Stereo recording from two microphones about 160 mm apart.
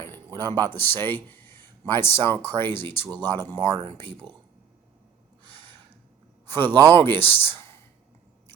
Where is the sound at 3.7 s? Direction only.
35° right (ahead or behind).